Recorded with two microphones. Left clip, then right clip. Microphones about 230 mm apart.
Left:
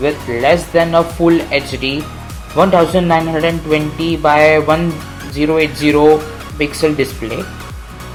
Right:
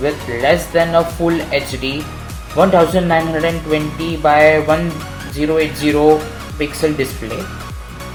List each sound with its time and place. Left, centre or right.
0.0 s speech: left